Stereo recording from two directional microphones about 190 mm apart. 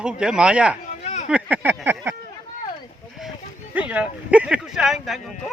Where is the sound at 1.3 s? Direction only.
5° right (ahead or behind).